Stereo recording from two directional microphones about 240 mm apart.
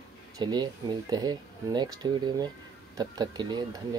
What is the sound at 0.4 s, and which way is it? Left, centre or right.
Speech, centre.